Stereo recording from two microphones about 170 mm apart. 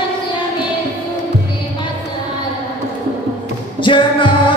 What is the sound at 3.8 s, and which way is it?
Music, 30° left (ahead or behind).